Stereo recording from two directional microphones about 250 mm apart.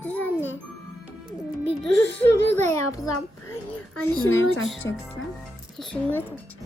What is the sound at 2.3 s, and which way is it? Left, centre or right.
Speech, centre.